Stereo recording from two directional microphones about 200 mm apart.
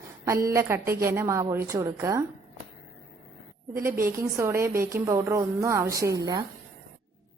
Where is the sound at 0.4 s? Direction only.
15° right (ahead or behind).